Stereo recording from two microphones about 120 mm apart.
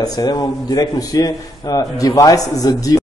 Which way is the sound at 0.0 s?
35° left (ahead or behind).